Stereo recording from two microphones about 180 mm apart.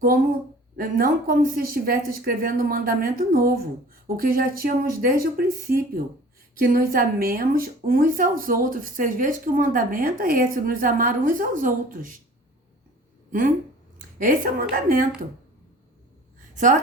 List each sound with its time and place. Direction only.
0.8 s speech: 50° right (ahead or behind)
14.2 s speech: 50° right (ahead or behind)